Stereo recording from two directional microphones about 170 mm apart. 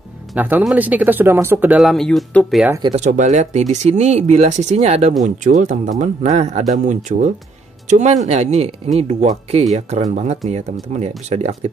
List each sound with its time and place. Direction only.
0.4 s speech: 10° right (ahead or behind)
2.9 s speech: 45° right (ahead or behind)